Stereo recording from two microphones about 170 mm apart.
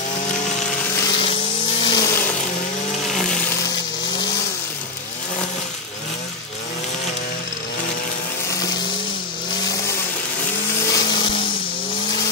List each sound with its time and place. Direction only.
1.0 s a sound: 30° left (ahead or behind)
1.8 s vehicle: 25° left (ahead or behind)
3.1 s music: centre (ahead or behind)
10.9 s blender: 25° left (ahead or behind)